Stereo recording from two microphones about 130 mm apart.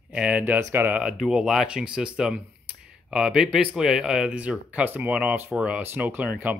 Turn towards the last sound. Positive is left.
turn(degrees=-10)  # may be behind; listen again after turning